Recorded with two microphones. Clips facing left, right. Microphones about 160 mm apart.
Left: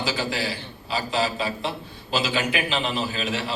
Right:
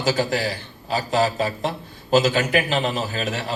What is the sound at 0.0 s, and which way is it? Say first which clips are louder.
A man's voice: right 5 dB; 45° right (ahead or behind).